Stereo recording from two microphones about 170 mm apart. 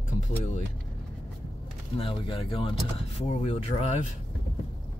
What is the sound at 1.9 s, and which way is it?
Speech, 30° left (ahead or behind).